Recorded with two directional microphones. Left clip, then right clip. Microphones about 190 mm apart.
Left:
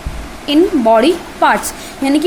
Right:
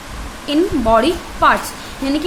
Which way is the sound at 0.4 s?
10° left (ahead or behind).